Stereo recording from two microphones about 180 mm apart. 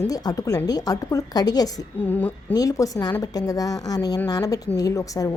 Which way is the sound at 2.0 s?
10° left (ahead or behind).